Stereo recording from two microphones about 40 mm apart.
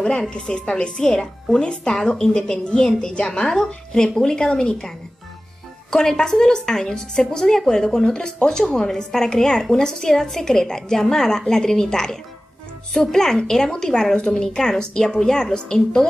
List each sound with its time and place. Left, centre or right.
0.0 s a woman's voice: left